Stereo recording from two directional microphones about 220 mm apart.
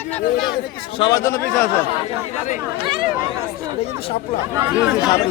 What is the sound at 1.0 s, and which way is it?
Speech, 15° left (ahead or behind).